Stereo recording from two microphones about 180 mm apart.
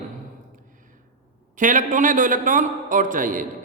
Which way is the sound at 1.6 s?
45° right (ahead or behind).